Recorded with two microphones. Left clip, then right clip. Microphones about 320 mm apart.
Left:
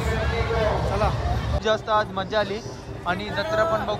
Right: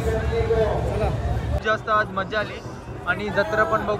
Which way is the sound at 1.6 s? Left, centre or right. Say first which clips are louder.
Right 1 dB; centre.